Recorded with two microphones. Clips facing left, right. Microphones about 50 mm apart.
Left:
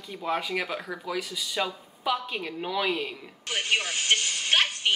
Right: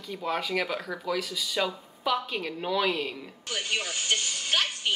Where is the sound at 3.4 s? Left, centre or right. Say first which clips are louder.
Left 4 dB; left.